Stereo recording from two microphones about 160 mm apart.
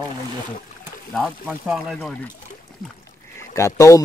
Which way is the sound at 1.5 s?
Centre (ahead or behind).